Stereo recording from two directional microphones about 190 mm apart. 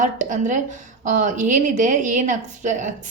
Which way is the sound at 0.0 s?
40° right (ahead or behind).